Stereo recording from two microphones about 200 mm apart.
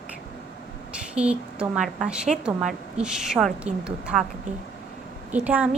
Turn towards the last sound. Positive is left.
turn(degrees=-5)  # may be behind; listen again after turning